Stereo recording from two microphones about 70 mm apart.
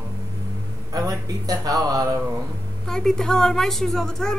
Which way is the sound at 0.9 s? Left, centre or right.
Right.